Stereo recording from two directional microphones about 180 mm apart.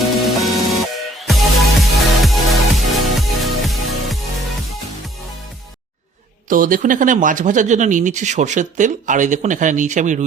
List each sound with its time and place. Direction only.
0.3 s music: centre (ahead or behind)
6.5 s speech: 50° right (ahead or behind)